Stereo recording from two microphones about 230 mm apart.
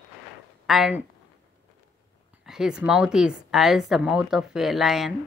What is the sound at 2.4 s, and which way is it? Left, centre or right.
A woman's voice, centre.